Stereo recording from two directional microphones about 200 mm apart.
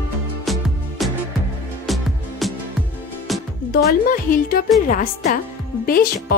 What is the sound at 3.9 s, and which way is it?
A woman's voice, 40° left (ahead or behind).